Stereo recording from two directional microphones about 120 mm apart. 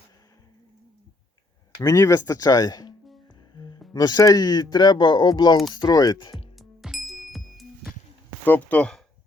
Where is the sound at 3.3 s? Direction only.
35° left (ahead or behind).